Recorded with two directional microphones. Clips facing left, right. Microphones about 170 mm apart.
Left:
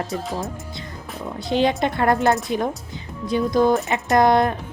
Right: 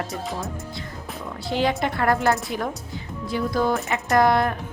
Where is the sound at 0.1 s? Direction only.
Centre (ahead or behind).